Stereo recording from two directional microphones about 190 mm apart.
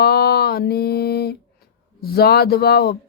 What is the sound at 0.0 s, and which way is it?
Music, 55° left (ahead or behind).